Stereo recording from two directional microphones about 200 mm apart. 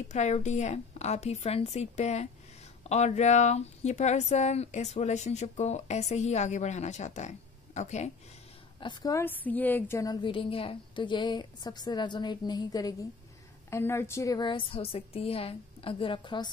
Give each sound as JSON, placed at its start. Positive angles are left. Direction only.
{"t": 0.1, "sound": "speech", "side_deg": 35}
{"t": 8.8, "sound": "a woman's voice", "side_deg": 15}